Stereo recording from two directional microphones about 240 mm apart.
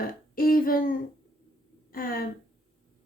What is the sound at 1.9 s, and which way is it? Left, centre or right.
Speech, left.